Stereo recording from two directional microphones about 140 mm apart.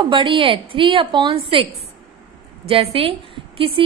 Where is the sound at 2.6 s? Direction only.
45° right (ahead or behind).